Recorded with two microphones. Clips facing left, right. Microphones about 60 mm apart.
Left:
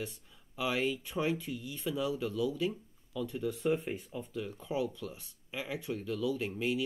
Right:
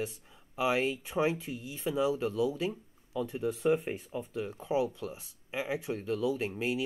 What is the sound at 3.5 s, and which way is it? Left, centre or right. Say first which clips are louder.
Speech: right 4 dB; centre.